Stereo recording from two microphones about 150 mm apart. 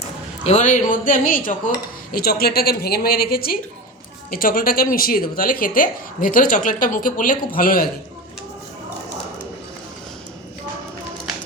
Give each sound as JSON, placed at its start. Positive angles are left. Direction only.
{"t": 0.4, "sound": "speech", "side_deg": 50}
{"t": 2.1, "sound": "a woman's voice", "side_deg": 90}
{"t": 4.3, "sound": "speech", "side_deg": 70}